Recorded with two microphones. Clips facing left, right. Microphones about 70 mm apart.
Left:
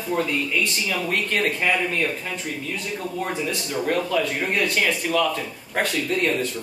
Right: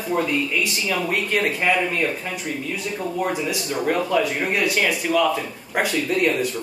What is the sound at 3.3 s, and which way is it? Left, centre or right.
Speech, centre.